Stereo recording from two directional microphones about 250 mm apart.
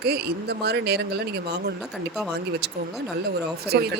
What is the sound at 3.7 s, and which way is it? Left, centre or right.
Speech, right.